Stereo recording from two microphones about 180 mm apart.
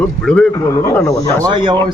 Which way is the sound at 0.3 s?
5° left (ahead or behind).